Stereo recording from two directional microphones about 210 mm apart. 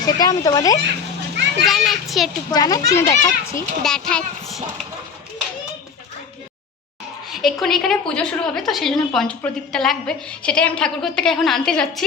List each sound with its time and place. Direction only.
0.0 s a child's voice: 15° left (ahead or behind)
1.6 s a woman's voice: centre (ahead or behind)
2.5 s a child's voice: 15° left (ahead or behind)
3.8 s a woman's voice: 5° left (ahead or behind)
7.4 s a woman's voice: centre (ahead or behind)